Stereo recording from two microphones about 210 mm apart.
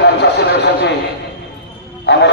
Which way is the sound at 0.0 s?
55° left (ahead or behind).